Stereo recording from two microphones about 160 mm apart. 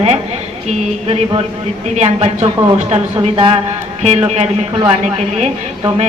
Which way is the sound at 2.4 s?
25° right (ahead or behind).